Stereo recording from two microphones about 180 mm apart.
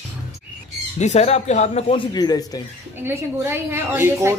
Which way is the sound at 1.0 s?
40° left (ahead or behind).